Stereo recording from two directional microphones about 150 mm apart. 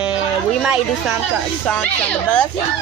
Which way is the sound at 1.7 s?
10° left (ahead or behind).